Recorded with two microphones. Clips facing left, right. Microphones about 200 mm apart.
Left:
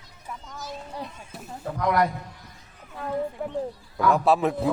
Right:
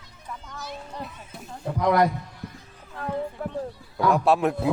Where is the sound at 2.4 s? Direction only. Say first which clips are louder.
Right 11 dB; 60° right (ahead or behind).